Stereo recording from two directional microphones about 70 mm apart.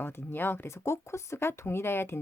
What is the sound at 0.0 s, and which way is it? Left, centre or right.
Speech, left.